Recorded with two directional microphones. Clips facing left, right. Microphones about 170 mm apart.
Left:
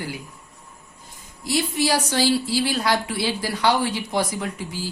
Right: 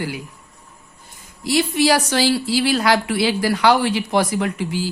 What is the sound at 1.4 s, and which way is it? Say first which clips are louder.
A woman's voice: right 5 dB; 75° right (ahead or behind).